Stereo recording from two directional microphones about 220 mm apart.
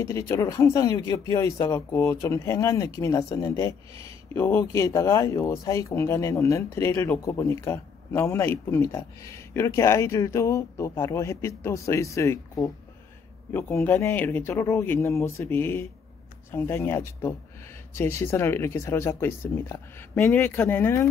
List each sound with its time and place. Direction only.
0.0 s speech: 15° left (ahead or behind)